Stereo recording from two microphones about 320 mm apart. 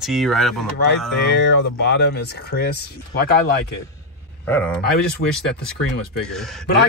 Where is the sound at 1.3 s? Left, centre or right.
Left.